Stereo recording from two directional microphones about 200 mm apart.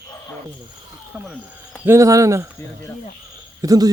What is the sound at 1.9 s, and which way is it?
Speech, 15° right (ahead or behind).